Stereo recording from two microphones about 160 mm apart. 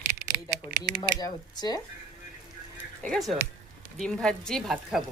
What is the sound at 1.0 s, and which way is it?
Speech, 25° left (ahead or behind).